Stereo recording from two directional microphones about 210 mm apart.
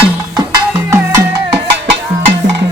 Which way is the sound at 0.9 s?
15° right (ahead or behind).